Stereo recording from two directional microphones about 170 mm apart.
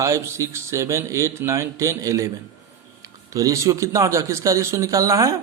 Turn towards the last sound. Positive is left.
turn(degrees=-20)  # may be behind; listen again after turning